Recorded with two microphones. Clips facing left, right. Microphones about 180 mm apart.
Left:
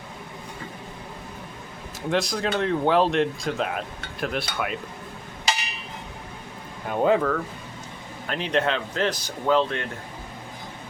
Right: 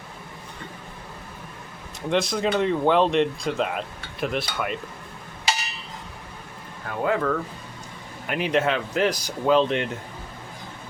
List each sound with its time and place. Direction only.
2.0 s speech: centre (ahead or behind)
6.8 s speech: 20° left (ahead or behind)
7.2 s speech: centre (ahead or behind); by 9.9 s 20° right (ahead or behind)